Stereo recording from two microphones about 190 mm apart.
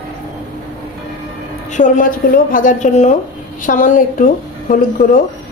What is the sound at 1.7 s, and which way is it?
A woman's voice, 40° left (ahead or behind).